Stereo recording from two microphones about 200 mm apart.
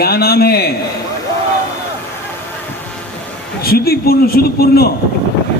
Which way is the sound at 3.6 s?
50° left (ahead or behind).